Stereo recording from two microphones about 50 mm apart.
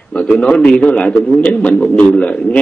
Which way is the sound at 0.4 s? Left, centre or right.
Left.